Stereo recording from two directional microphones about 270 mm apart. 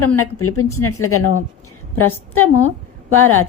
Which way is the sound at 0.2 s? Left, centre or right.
Left.